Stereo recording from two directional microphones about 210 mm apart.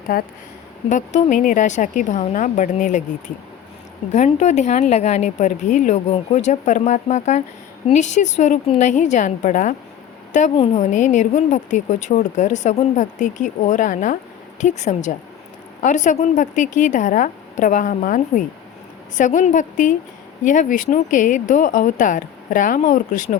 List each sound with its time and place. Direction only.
0.1 s a woman's voice: 45° left (ahead or behind)